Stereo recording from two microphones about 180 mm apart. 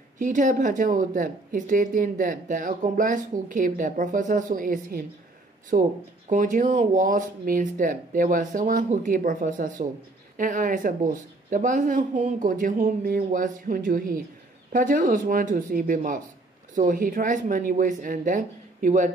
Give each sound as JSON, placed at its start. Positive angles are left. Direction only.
{"t": 0.2, "sound": "speech", "side_deg": -45}